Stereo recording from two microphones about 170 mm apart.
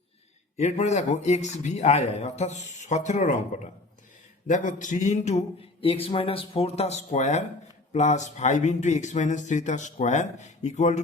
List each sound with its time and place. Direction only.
0.5 s a man's voice: 40° left (ahead or behind)